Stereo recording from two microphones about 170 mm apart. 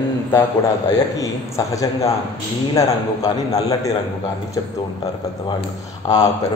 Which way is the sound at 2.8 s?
20° left (ahead or behind).